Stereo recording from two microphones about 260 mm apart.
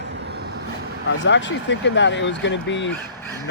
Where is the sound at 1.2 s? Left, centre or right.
Left.